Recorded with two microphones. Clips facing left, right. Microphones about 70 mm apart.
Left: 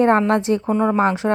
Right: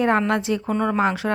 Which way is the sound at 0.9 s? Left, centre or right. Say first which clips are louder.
Left 3 dB; left.